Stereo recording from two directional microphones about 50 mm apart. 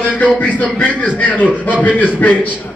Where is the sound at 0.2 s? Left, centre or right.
Left.